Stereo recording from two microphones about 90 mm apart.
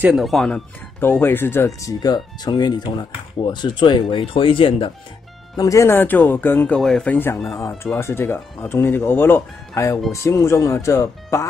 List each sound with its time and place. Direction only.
0.1 s speech: centre (ahead or behind)
1.0 s speech: 25° left (ahead or behind)
1.8 s speech: 40° left (ahead or behind); by 4.9 s 75° left (ahead or behind)
5.6 s speech: 35° left (ahead or behind); by 6.8 s 20° left (ahead or behind)
6.8 s speech: 5° left (ahead or behind)
7.1 s speech: 25° left (ahead or behind)
7.3 s speech: 5° left (ahead or behind)
7.6 s speech: 30° left (ahead or behind)